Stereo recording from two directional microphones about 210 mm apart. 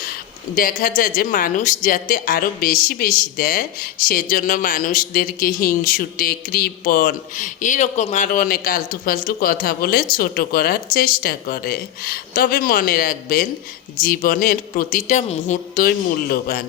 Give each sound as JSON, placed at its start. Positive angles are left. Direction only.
{"t": 0.0, "sound": "a woman's voice", "side_deg": 45}